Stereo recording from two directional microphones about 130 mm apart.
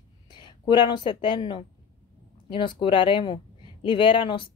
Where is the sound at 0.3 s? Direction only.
35° left (ahead or behind).